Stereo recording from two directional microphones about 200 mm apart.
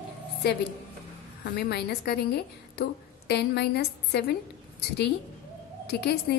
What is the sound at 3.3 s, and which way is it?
A woman's voice, 55° left (ahead or behind).